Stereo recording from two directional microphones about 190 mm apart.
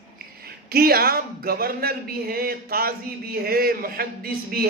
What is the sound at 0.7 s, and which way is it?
A man's voice, 50° right (ahead or behind).